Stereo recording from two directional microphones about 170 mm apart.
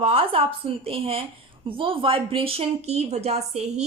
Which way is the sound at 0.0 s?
35° right (ahead or behind).